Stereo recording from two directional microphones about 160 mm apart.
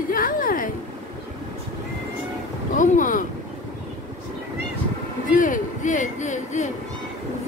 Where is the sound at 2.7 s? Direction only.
55° left (ahead or behind).